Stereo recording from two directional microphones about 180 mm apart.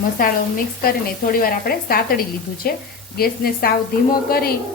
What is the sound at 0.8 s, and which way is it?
Speech, 55° left (ahead or behind).